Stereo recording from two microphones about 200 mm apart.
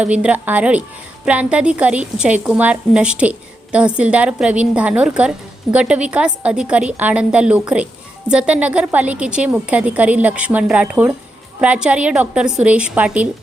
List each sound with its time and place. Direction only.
0.0 s a woman's voice: 5° right (ahead or behind)